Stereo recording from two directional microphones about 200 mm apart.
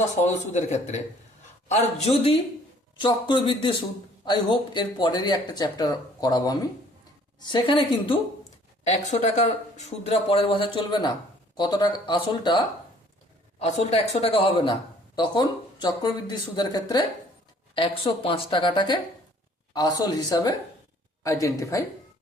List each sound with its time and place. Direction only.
0.2 s a man's voice: 35° left (ahead or behind)
8.9 s speech: 35° left (ahead or behind); by 21.8 s 15° left (ahead or behind)